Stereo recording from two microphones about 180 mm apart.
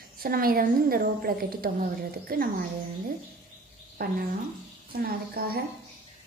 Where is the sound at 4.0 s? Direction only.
55° right (ahead or behind).